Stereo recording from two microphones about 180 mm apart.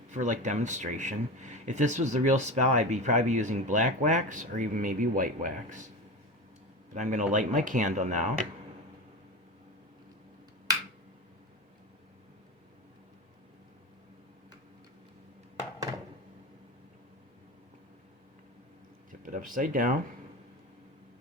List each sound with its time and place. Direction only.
0.1 s speech: 45° right (ahead or behind)
6.9 s speech: 45° right (ahead or behind)
19.2 s speech: 50° right (ahead or behind)